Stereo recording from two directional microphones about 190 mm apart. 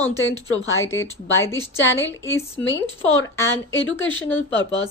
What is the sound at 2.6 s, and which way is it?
Speech, 90° left.